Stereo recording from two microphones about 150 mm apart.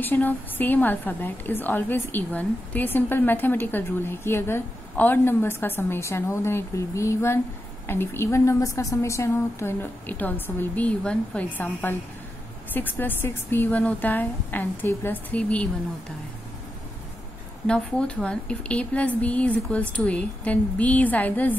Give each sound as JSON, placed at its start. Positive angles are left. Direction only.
{"t": 0.0, "sound": "a woman's voice", "side_deg": 10}
{"t": 17.6, "sound": "a woman's voice", "side_deg": 5}